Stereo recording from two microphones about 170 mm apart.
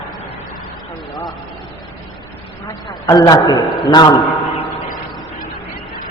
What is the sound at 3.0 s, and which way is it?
A man's voice, 20° left (ahead or behind).